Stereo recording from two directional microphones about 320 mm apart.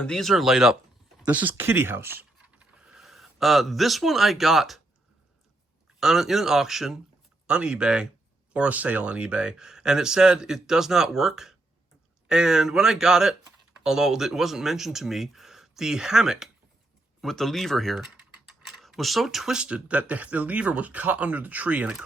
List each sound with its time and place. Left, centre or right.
0.0 s speech: centre
6.0 s speech: centre